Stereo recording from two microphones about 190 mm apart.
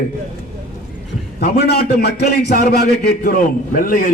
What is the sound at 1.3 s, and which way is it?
A man's voice, 55° left (ahead or behind).